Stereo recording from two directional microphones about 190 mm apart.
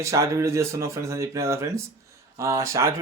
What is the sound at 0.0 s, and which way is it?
Speech, 15° right (ahead or behind).